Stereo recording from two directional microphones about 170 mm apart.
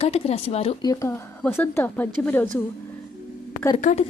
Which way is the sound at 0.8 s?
20° left (ahead or behind).